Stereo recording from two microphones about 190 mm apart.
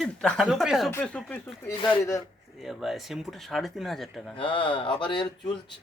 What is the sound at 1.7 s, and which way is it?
Speech, 20° left (ahead or behind).